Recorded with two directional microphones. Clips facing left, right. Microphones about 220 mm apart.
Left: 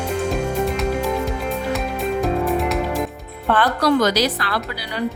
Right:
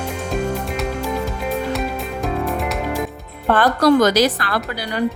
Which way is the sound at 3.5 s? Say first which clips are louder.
Right 3 dB; 45° right (ahead or behind).